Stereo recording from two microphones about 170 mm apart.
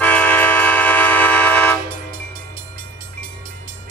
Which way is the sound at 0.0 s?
10° left (ahead or behind).